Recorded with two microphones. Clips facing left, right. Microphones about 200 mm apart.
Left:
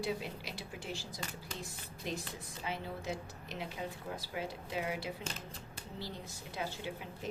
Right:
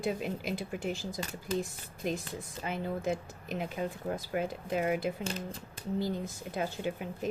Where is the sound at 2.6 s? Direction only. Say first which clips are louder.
Right 7 dB; 50° right (ahead or behind).